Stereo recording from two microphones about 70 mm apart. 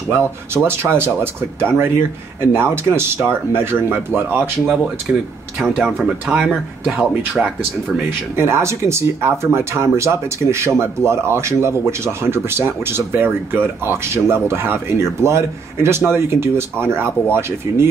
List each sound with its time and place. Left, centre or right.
0.2 s speech: right
5.1 s speech: centre
8.4 s speech: right